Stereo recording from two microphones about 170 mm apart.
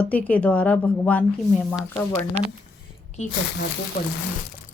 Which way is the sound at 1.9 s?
20° left (ahead or behind).